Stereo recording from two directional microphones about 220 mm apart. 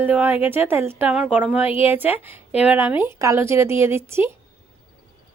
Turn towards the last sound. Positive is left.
turn(degrees=-10)  # may be behind; listen again after turning